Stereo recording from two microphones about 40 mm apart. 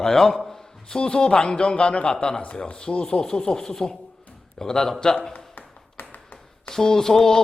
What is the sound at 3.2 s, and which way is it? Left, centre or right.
Music, centre.